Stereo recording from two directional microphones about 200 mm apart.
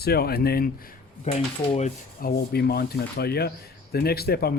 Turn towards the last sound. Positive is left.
turn(degrees=50)  # may be behind; listen again after turning